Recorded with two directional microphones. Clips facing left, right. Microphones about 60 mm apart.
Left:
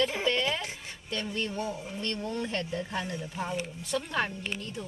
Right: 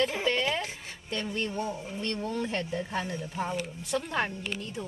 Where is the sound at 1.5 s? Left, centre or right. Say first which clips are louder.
Right 1 dB; right.